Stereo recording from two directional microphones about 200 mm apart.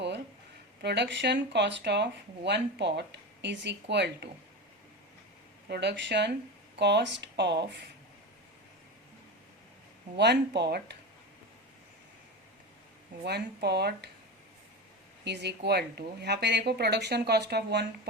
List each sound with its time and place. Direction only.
0.8 s speech: 60° right (ahead or behind)
5.6 s speech: 55° right (ahead or behind)
10.2 s speech: 60° right (ahead or behind)
13.2 s speech: 55° right (ahead or behind)
15.2 s speech: 60° right (ahead or behind)